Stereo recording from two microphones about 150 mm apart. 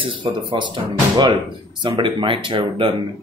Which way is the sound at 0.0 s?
30° right (ahead or behind).